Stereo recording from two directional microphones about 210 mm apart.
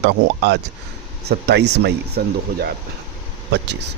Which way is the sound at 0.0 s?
55° right (ahead or behind).